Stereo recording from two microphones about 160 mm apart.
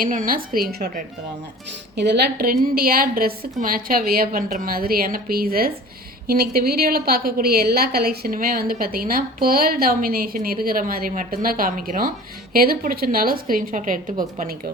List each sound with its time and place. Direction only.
0.0 s a woman's voice: 60° right (ahead or behind)
2.0 s a woman's voice: 90° right; by 14.0 s 55° right (ahead or behind)
14.3 s a woman's voice: 65° right (ahead or behind)